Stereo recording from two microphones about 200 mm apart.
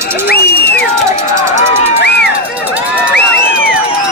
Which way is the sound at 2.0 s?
55° left (ahead or behind).